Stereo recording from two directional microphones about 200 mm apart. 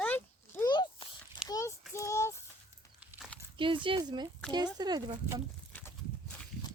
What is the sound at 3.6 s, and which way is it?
Speech, 25° right (ahead or behind).